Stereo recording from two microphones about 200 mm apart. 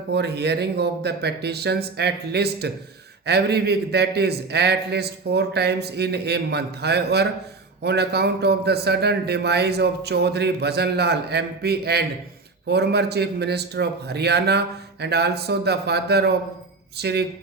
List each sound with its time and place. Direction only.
0.1 s a man's voice: 55° right (ahead or behind)